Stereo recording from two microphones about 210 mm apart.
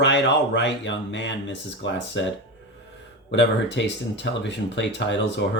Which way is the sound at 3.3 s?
55° left (ahead or behind).